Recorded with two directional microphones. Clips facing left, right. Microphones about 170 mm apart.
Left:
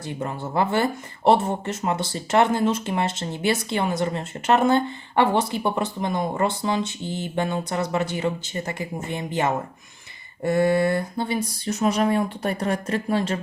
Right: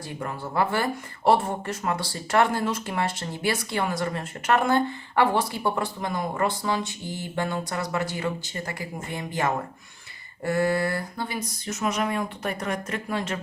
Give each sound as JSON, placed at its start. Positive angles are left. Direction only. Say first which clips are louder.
{"t": 0.2, "sound": "speech", "louder": "left 2 dB", "side_deg": 25}